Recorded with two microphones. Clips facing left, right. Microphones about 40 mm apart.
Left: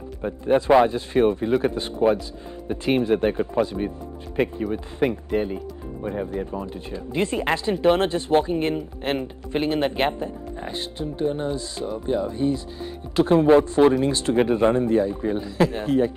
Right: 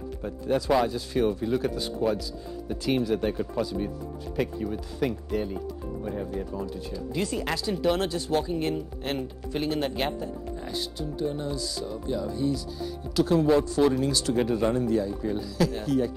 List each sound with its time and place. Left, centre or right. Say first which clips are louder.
0.2 s speech: left 7 dB; left